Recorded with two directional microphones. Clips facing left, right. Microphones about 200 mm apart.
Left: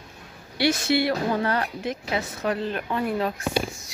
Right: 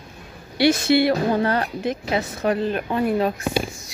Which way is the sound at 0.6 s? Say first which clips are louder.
Right 5 dB; 20° right (ahead or behind).